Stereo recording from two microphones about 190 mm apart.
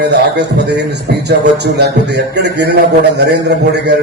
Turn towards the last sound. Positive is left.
turn(degrees=-60)  # may be behind; listen again after turning